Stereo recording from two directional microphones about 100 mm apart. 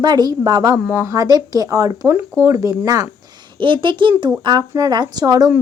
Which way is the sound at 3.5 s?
60° right (ahead or behind).